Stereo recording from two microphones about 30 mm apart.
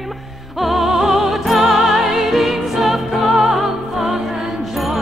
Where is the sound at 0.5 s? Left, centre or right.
Centre.